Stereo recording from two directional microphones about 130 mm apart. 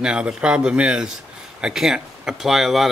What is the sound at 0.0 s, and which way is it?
Speech, 5° right (ahead or behind).